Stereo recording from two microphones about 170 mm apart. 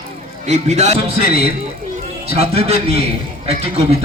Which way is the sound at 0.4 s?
40° right (ahead or behind).